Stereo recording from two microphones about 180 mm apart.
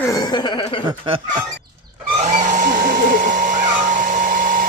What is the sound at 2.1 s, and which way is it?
Hair dryer, 40° right (ahead or behind).